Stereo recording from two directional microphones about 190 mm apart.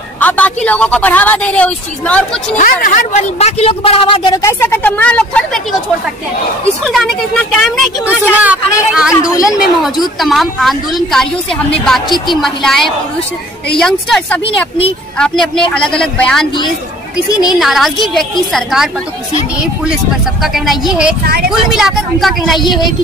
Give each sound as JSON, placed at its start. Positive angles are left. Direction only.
{"t": 0.2, "sound": "a man's voice", "side_deg": 10}
{"t": 2.5, "sound": "a woman's voice", "side_deg": 40}
{"t": 6.8, "sound": "a woman's voice", "side_deg": 0}
{"t": 9.1, "sound": "a woman's voice", "side_deg": 15}
{"t": 9.4, "sound": "a woman's voice", "side_deg": 0}
{"t": 17.5, "sound": "a woman's voice", "side_deg": 0}
{"t": 20.4, "sound": "a woman's voice", "side_deg": 0}